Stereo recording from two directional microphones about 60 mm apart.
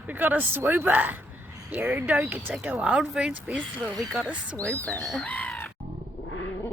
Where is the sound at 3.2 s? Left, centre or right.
Centre.